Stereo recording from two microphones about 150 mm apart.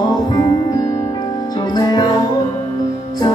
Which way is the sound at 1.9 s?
30° left (ahead or behind).